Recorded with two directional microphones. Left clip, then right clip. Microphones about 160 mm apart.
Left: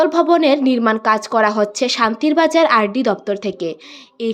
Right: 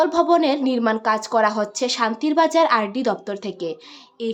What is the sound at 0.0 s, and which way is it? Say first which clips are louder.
A woman's voice: left 4 dB; 20° left (ahead or behind).